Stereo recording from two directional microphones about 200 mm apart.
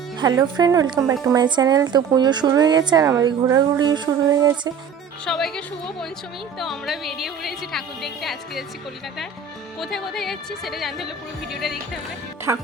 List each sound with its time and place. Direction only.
0.2 s a woman's voice: 20° right (ahead or behind)
5.2 s a woman's voice: centre (ahead or behind)
9.8 s a woman's voice: centre (ahead or behind)
12.5 s speech: 15° right (ahead or behind)